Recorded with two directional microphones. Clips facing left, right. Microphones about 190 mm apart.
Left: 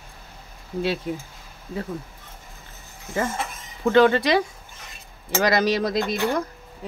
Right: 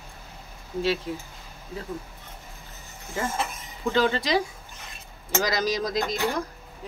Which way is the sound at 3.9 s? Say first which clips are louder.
Left 6 dB; 60° left (ahead or behind).